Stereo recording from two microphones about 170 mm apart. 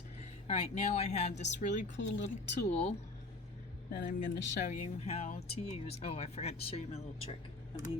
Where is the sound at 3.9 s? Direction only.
50° left (ahead or behind).